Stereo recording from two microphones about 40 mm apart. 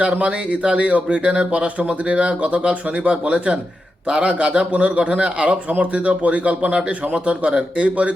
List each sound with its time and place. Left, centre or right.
0.0 s a man's voice: right